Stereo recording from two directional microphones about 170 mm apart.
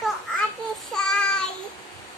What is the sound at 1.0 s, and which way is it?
Child singing, 5° left (ahead or behind).